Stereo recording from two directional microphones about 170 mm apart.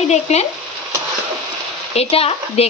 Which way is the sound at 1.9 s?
35° left (ahead or behind).